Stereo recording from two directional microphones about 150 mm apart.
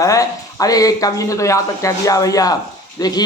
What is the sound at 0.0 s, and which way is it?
Speech, 20° left (ahead or behind).